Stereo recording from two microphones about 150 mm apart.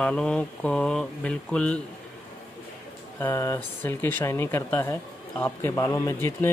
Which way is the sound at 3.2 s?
20° left (ahead or behind).